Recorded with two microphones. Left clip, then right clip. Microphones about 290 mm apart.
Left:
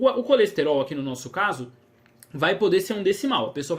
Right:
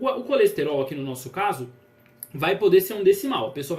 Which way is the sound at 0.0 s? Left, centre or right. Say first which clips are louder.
Left 2 dB; left.